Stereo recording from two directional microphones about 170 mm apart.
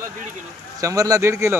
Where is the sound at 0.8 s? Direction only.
20° right (ahead or behind).